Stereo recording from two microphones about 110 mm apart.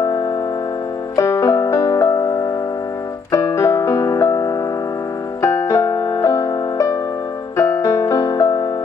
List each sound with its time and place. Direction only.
1.1 s music: 30° left (ahead or behind)
3.3 s keyboard: 25° left (ahead or behind)
5.4 s music: 25° left (ahead or behind)